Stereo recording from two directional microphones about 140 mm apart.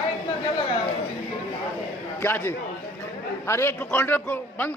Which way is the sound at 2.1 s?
15° left (ahead or behind).